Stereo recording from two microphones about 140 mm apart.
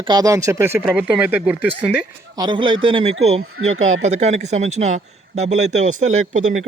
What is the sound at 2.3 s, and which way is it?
Speech, 30° right (ahead or behind).